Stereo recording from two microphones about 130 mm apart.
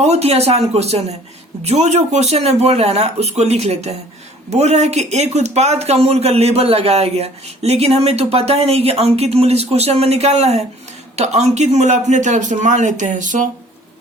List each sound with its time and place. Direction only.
0.0 s speech: 55° right (ahead or behind); by 13.5 s 80° right